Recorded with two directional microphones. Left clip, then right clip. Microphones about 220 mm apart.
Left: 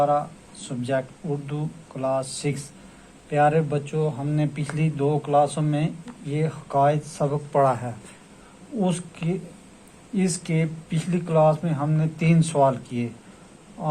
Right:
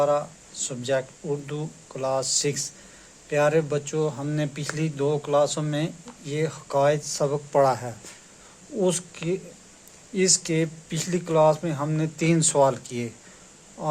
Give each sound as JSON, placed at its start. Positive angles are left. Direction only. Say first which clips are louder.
{"t": 0.0, "sound": "speech", "louder": "left 1 dB", "side_deg": -35}